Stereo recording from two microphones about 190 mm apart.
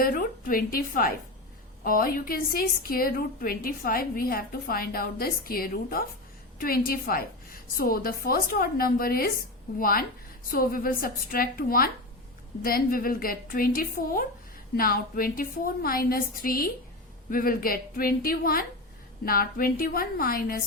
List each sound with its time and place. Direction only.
0.0 s a woman's voice: 50° left (ahead or behind)